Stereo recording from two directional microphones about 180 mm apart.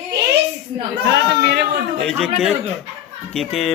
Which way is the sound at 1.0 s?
70° right (ahead or behind).